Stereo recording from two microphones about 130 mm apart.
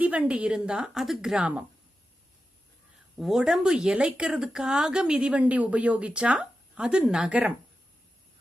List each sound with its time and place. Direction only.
0.0 s speech: 10° right (ahead or behind)
3.2 s speech: 5° right (ahead or behind)